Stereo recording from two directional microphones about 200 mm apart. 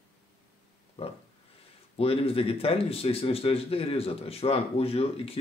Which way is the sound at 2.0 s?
30° left (ahead or behind).